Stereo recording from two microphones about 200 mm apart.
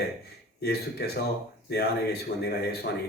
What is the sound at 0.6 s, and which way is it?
Speech, 50° left (ahead or behind).